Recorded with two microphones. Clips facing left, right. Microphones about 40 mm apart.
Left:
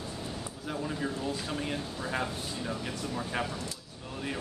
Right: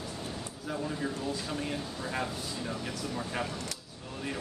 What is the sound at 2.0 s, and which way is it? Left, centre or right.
Speech, centre.